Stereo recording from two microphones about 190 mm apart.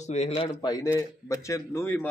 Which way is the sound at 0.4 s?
20° left (ahead or behind).